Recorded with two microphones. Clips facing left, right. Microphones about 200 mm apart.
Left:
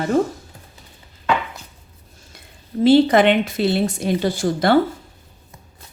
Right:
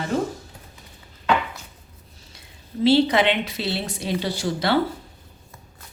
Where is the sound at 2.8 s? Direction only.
50° left (ahead or behind).